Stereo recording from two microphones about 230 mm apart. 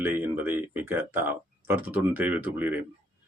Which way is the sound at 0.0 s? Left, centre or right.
Centre.